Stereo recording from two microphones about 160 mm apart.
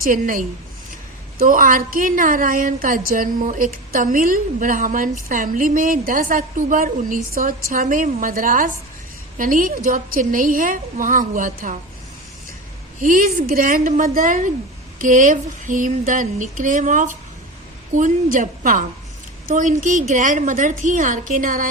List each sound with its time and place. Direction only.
0.0 s speech: 60° right (ahead or behind)
13.0 s a woman's voice: 60° right (ahead or behind)